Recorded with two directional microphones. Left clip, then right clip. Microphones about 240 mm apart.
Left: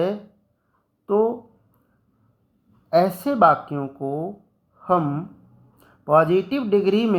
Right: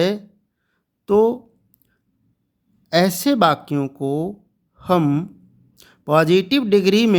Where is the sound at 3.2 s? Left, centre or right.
Right.